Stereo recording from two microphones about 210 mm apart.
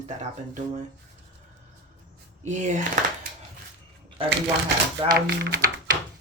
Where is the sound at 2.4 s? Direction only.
35° right (ahead or behind).